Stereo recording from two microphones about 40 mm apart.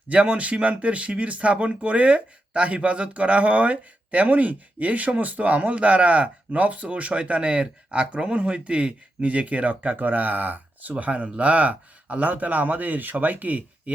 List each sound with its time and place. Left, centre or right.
0.1 s speech: right
10.9 s speech: right